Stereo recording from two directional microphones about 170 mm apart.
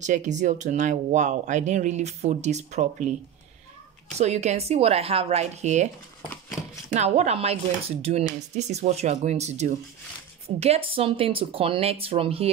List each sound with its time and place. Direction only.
0.0 s speech: 45° right (ahead or behind)
4.2 s speech: 40° right (ahead or behind)
6.9 s speech: 40° right (ahead or behind)